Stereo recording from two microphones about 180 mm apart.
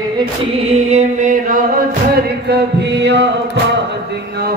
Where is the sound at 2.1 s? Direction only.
60° right (ahead or behind).